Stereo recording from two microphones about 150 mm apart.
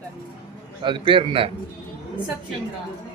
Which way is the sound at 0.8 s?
35° right (ahead or behind).